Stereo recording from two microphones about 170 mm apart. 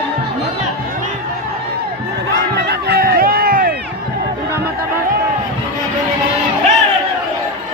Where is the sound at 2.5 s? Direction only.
75° right (ahead or behind).